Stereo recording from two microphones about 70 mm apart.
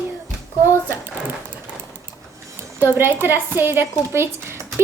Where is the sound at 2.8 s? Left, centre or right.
Right.